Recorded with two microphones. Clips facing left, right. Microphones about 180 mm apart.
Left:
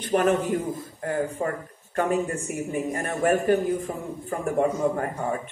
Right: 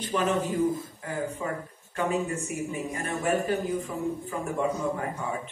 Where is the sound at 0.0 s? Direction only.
55° left (ahead or behind).